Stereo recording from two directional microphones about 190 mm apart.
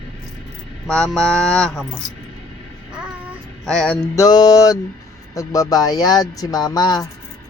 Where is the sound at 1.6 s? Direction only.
Centre (ahead or behind).